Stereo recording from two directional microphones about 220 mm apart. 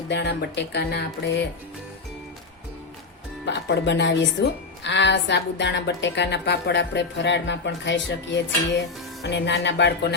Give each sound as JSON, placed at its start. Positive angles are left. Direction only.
{"t": 0.1, "sound": "a woman's voice", "side_deg": 50}
{"t": 3.4, "sound": "a woman's voice", "side_deg": 50}